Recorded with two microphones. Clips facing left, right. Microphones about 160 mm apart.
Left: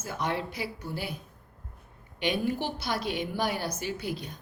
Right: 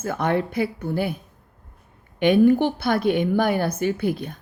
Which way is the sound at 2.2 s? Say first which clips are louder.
Right 13 dB; 55° right (ahead or behind).